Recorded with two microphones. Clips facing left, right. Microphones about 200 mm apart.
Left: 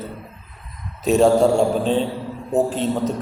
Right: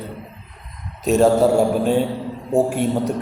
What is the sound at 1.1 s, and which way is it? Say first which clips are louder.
Speech: even; centre (ahead or behind).